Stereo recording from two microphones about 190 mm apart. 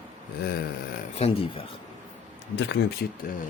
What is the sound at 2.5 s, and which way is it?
Speech, 65° left (ahead or behind).